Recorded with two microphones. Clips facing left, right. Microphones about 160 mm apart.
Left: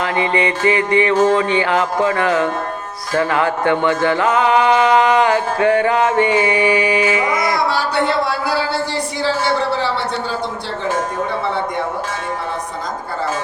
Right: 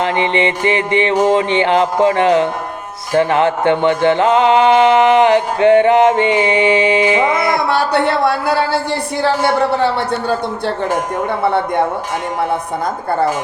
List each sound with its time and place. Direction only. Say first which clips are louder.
0.0 s music: right 2 dB; 25° right (ahead or behind)
7.7 s a sound: right 3 dB; 60° right (ahead or behind)
9.2 s a man's voice: right 4 dB; 60° right (ahead or behind)